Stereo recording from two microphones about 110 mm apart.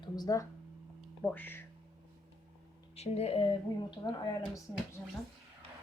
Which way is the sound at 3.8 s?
40° left (ahead or behind).